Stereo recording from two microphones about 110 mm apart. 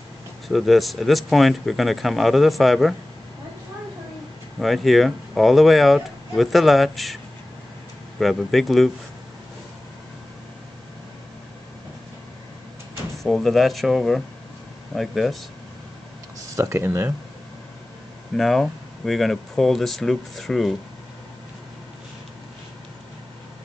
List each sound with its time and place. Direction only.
0.5 s speech: centre (ahead or behind)
4.6 s speech: centre (ahead or behind)
8.2 s speech: centre (ahead or behind)
13.2 s speech: centre (ahead or behind)
16.5 s speech: 25° right (ahead or behind)
18.3 s speech: centre (ahead or behind)